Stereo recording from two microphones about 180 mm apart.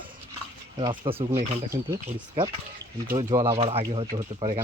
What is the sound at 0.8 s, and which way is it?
Speech, 25° right (ahead or behind).